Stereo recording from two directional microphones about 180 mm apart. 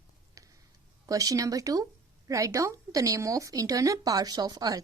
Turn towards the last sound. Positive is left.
turn(degrees=-20)  # may be behind; listen again after turning